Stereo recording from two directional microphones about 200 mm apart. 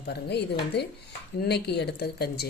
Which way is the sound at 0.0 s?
55° left (ahead or behind).